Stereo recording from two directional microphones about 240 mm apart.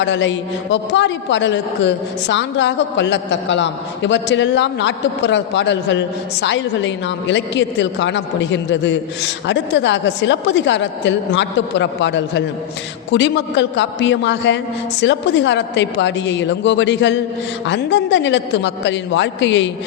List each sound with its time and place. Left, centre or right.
0.0 s a man's voice: left